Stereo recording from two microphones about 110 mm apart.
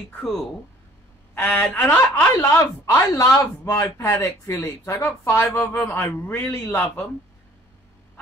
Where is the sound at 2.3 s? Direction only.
30° left (ahead or behind).